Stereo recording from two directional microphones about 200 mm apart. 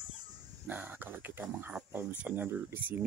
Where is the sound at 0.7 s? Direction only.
10° right (ahead or behind).